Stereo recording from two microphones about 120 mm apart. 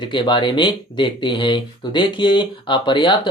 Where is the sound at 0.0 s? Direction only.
40° left (ahead or behind).